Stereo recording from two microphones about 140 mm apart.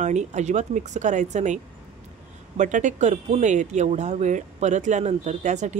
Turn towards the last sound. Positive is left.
turn(degrees=-60)  # may be behind; listen again after turning